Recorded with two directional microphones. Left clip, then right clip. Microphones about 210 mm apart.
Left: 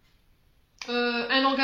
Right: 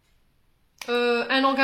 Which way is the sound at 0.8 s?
55° right (ahead or behind).